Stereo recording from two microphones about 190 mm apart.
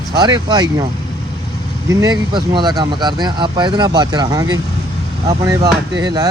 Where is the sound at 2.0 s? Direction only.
20° right (ahead or behind).